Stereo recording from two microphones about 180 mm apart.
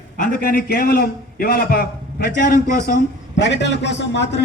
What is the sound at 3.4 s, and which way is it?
A man's voice, 75° left (ahead or behind).